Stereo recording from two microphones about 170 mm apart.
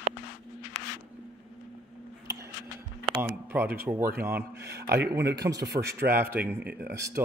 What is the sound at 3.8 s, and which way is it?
Speech, 15° right (ahead or behind).